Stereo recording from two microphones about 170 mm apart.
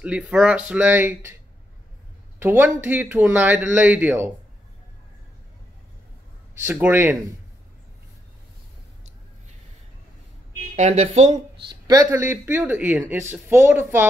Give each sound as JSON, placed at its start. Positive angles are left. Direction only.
{"t": 0.0, "sound": "speech", "side_deg": -5}
{"t": 2.3, "sound": "speech", "side_deg": -15}
{"t": 6.6, "sound": "speech", "side_deg": -10}
{"t": 10.8, "sound": "speech", "side_deg": -45}
{"t": 11.3, "sound": "speech", "side_deg": -20}